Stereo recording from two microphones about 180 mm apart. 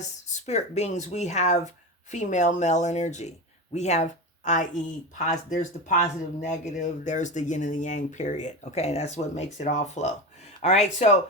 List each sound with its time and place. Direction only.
0.0 s speech: 40° left (ahead or behind)